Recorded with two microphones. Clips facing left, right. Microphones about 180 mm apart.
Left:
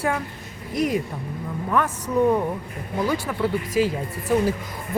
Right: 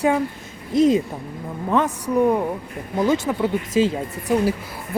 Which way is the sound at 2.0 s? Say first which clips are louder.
Left 1 dB; 10° right (ahead or behind).